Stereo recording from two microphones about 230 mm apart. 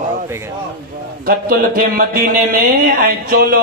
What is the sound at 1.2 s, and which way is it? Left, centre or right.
Speech, right.